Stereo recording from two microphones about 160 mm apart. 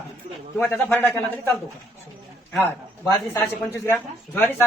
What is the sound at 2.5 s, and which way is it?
Speech, 15° left (ahead or behind).